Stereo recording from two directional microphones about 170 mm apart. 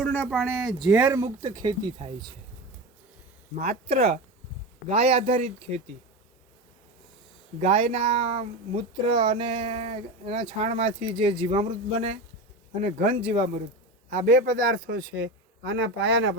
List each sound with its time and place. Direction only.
0.0 s a sound: 10° left (ahead or behind)
0.3 s speech: centre (ahead or behind)
0.9 s speech: 10° right (ahead or behind)
3.7 s speech: 65° right (ahead or behind)
4.9 s speech: 40° right (ahead or behind)
7.6 s speech: 35° right (ahead or behind)
14.1 s a man's voice: 50° right (ahead or behind); by 16.3 s 90° right